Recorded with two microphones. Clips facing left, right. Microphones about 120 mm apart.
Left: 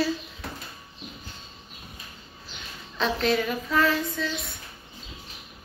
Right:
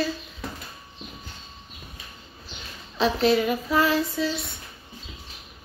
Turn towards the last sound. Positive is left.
turn(degrees=-5)  # may be behind; listen again after turning